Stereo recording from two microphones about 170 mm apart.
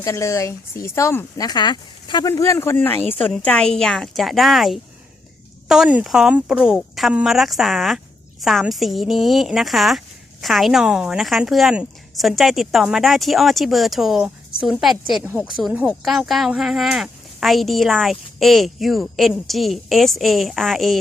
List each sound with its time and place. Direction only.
0.0 s speech: 15° left (ahead or behind)
1.5 s speech: 25° left (ahead or behind); by 21.0 s centre (ahead or behind)